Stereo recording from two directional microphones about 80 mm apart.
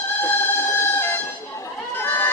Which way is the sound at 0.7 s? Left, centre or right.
Left.